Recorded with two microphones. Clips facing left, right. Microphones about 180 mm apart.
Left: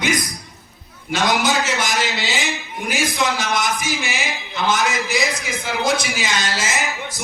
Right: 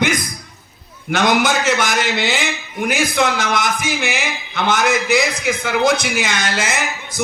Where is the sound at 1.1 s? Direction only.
55° right (ahead or behind).